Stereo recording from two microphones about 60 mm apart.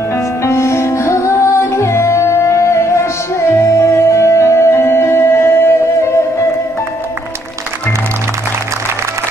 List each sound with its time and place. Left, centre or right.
0.4 s music: left